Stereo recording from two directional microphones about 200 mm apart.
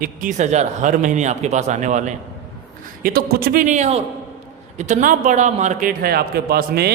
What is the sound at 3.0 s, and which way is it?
A man's voice, 50° right (ahead or behind).